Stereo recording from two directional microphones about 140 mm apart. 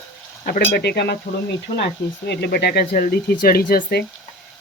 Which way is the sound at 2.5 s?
90° left.